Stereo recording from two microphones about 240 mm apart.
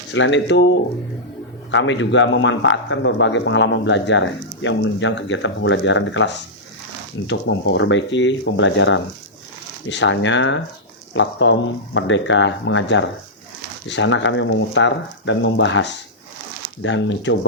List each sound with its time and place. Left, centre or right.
0.1 s speech: left